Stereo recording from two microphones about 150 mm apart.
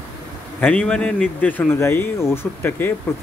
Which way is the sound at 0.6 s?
5° left (ahead or behind).